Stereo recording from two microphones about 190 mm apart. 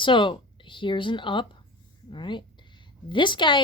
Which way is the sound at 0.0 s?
25° left (ahead or behind).